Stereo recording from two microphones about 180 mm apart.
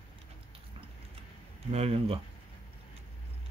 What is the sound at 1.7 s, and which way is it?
Speech, 35° right (ahead or behind).